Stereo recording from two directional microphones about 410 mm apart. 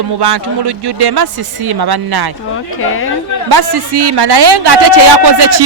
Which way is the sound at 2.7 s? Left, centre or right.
Left.